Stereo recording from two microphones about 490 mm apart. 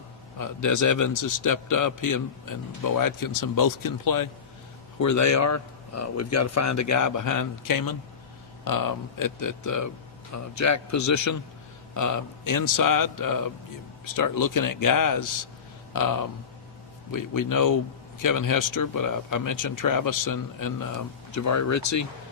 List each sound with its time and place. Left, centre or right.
0.3 s speech: left